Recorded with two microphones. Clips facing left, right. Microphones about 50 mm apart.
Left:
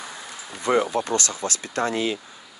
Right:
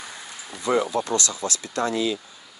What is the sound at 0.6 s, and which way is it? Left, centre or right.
Speech, left.